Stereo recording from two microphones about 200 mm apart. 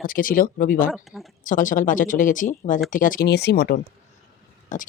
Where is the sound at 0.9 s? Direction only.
5° right (ahead or behind).